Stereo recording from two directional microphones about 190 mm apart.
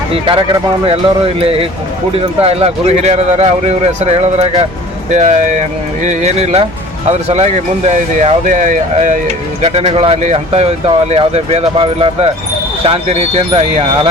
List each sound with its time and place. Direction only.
1.4 s speech: 30° right (ahead or behind)